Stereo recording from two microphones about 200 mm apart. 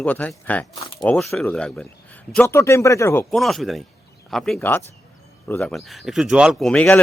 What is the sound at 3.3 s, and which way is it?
Speech, centre (ahead or behind).